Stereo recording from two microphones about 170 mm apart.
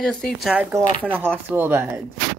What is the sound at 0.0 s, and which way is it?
Speech, 5° left (ahead or behind).